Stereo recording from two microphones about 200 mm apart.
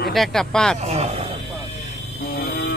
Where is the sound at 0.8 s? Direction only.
35° right (ahead or behind).